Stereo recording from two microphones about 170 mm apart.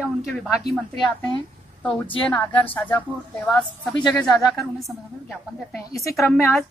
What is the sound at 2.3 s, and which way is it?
Speech, 15° left (ahead or behind).